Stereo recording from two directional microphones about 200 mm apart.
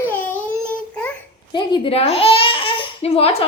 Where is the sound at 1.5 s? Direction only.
25° left (ahead or behind).